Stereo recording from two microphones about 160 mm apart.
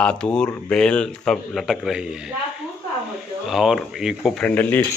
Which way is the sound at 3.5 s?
Centre (ahead or behind).